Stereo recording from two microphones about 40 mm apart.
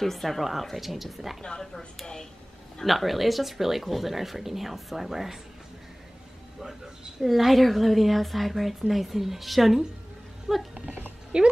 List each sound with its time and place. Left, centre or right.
0.0 s a woman's voice: centre
2.8 s a woman's voice: centre
6.6 s a woman's voice: centre
11.3 s speech: right